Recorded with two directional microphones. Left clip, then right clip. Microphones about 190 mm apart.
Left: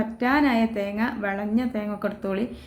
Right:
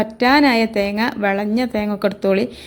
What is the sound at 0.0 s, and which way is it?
A woman's voice, 40° right (ahead or behind).